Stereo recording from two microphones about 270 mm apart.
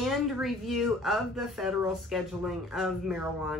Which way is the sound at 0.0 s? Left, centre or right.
Centre.